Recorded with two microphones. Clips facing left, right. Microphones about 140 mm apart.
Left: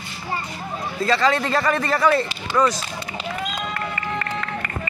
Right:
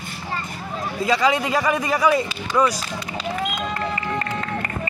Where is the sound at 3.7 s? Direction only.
25° right (ahead or behind).